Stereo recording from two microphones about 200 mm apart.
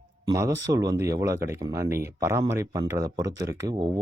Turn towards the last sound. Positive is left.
turn(degrees=-15)  # may be behind; listen again after turning